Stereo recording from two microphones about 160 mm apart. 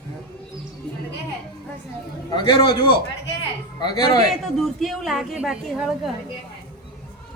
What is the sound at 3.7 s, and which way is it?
Speech, 25° left (ahead or behind).